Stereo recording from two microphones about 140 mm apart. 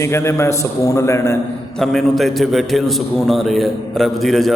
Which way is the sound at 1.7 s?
Centre (ahead or behind).